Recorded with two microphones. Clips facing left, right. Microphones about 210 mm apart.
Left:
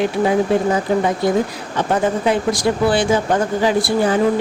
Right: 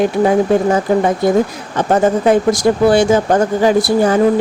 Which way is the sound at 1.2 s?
45° right (ahead or behind).